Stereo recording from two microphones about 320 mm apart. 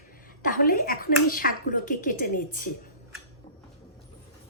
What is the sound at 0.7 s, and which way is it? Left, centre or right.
Speech, left.